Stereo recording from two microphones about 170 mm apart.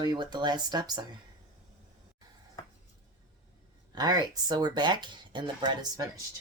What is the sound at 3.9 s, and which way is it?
Speech, 25° right (ahead or behind).